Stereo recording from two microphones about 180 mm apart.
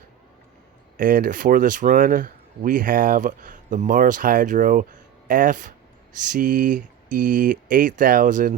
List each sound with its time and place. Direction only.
0.9 s speech: 50° right (ahead or behind)